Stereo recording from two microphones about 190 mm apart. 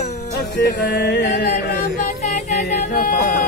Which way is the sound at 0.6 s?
55° left (ahead or behind).